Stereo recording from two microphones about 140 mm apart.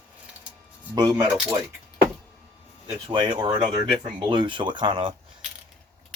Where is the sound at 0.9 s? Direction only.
30° right (ahead or behind).